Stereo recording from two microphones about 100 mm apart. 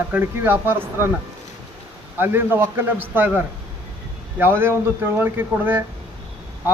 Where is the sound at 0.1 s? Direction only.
20° right (ahead or behind).